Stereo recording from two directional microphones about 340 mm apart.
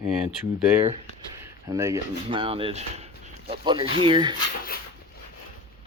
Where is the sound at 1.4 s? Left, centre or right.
Centre.